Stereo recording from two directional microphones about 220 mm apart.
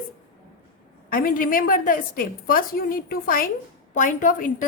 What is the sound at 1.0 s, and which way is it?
A woman's voice, 40° left (ahead or behind).